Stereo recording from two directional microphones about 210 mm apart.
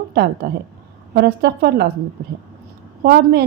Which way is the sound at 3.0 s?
45° right (ahead or behind).